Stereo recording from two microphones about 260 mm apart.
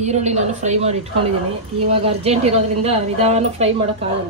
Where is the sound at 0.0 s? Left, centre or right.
Right.